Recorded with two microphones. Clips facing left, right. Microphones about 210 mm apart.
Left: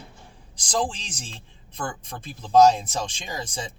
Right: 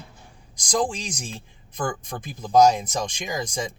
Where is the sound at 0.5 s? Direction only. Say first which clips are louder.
Right 2 dB; 10° right (ahead or behind).